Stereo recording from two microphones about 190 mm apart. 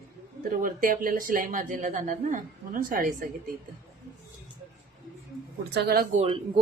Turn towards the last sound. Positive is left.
turn(degrees=-30)  # may be behind; listen again after turning